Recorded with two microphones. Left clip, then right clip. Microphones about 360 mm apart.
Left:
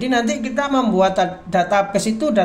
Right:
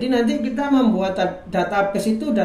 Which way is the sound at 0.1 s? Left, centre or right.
Left.